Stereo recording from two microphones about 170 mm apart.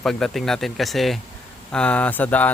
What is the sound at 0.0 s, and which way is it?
A man's voice, centre (ahead or behind).